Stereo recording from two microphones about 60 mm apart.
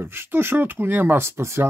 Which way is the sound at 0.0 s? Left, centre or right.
Right.